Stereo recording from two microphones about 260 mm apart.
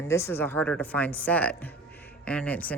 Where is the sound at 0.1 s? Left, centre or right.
Centre.